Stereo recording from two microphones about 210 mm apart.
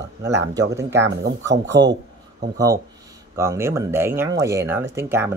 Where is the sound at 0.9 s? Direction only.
60° right (ahead or behind).